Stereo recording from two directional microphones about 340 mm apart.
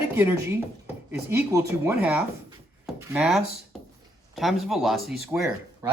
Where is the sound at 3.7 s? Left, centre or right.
Centre.